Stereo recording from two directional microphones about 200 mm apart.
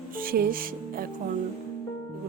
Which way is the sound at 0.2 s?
45° right (ahead or behind).